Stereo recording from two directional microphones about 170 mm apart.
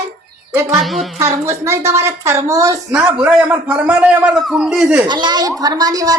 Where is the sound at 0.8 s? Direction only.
Centre (ahead or behind).